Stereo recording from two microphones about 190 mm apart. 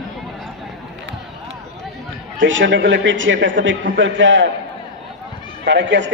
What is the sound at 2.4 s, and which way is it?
A man's voice, 80° right.